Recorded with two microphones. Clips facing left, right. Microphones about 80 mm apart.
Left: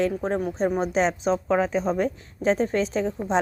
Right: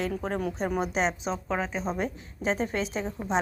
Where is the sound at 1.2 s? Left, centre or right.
Centre.